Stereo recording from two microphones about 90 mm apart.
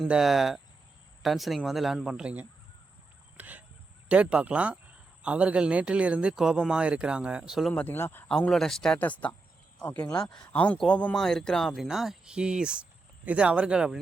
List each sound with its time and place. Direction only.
0.1 s speech: 5° right (ahead or behind)
3.3 s fowl: 15° right (ahead or behind)
4.1 s speech: 15° right (ahead or behind)
7.7 s speech: 20° left (ahead or behind)
8.3 s speech: 5° left (ahead or behind)
9.0 s speech: 15° left (ahead or behind); by 14.0 s 10° right (ahead or behind)